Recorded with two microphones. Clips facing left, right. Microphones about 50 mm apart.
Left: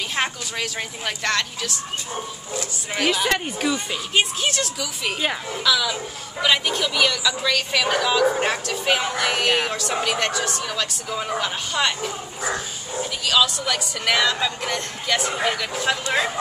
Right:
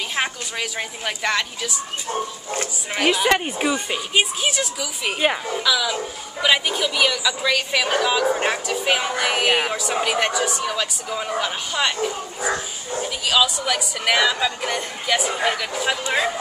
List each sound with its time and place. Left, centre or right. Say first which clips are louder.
0.1 s speech: even; centre
3.3 s speech: right 3 dB; centre
4.1 s speech: even; centre